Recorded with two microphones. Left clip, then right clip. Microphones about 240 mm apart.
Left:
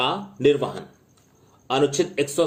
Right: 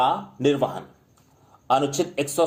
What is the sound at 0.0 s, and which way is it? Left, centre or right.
Speech, right.